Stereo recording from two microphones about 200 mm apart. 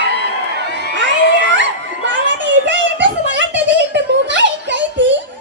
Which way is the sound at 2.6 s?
65° right (ahead or behind).